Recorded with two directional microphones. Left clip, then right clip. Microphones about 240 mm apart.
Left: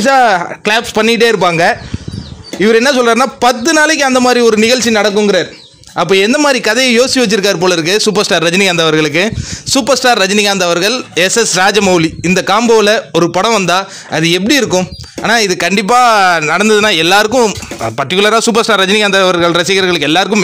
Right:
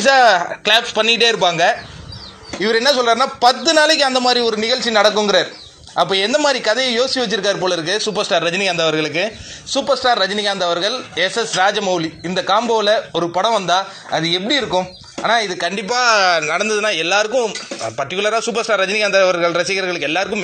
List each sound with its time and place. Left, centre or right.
0.0 s speech: left
16.0 s speech: centre; by 20.4 s left